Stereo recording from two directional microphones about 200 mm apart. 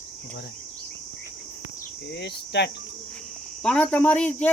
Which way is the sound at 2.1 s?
55° left (ahead or behind).